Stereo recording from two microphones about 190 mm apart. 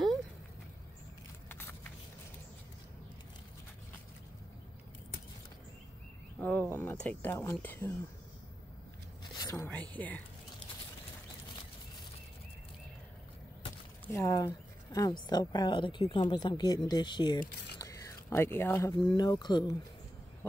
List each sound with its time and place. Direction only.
1.5 s vehicle: 10° left (ahead or behind)
6.4 s speech: 10° left (ahead or behind)
9.3 s speech: 20° left (ahead or behind)
14.1 s speech: 15° left (ahead or behind)